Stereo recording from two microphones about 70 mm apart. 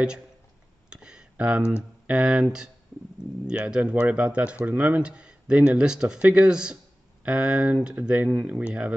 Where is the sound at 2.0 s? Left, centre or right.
Centre.